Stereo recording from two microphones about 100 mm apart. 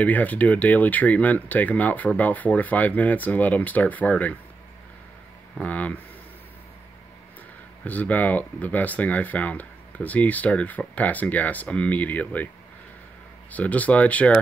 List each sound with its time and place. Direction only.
0.0 s speech: 15° left (ahead or behind)
5.6 s speech: 15° left (ahead or behind)
7.8 s speech: 15° left (ahead or behind)
13.5 s speech: 15° left (ahead or behind)